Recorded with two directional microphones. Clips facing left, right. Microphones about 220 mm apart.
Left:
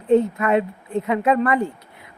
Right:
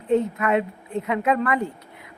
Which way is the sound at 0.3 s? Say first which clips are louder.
Left 2 dB; 30° left (ahead or behind).